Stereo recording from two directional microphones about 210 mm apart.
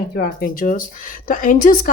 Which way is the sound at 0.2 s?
40° left (ahead or behind).